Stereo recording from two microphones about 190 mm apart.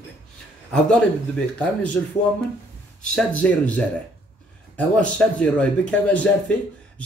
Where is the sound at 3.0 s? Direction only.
5° left (ahead or behind).